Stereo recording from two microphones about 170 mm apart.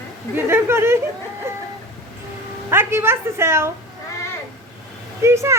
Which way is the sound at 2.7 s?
15° right (ahead or behind).